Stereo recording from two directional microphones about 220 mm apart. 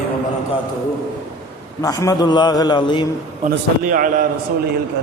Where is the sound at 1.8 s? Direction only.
15° left (ahead or behind).